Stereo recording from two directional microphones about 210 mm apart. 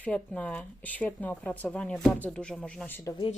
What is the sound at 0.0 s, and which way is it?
Speech, 5° left (ahead or behind).